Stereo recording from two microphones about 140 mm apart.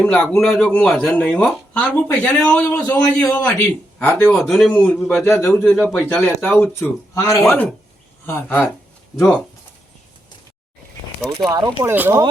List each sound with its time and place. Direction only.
0.0 s a man's voice: 10° left (ahead or behind)
4.7 s a man's voice: 15° left (ahead or behind)
5.5 s speech: centre (ahead or behind)
6.7 s a man's voice: 20° left (ahead or behind)
11.2 s speech: 5° left (ahead or behind)
11.4 s speech: 30° right (ahead or behind)
11.9 s speech: 15° right (ahead or behind)